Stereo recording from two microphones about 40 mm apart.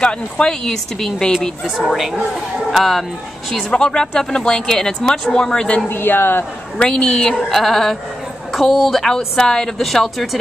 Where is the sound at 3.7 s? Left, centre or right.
Centre.